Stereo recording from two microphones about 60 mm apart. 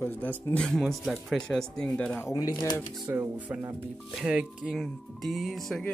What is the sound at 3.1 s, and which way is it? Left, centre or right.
Speech, right.